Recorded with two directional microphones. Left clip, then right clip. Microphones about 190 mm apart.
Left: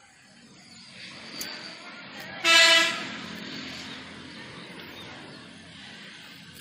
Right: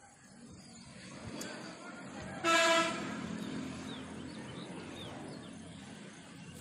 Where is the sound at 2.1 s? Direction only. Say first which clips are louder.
Left 10 dB; 45° right (ahead or behind).